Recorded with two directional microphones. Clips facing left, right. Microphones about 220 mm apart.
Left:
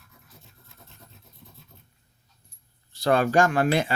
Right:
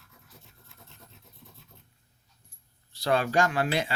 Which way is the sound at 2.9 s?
50° left (ahead or behind).